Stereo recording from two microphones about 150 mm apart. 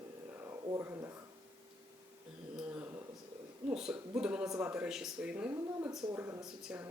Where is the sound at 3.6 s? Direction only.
5° right (ahead or behind).